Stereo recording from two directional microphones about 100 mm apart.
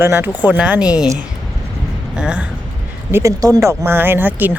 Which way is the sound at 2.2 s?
10° right (ahead or behind).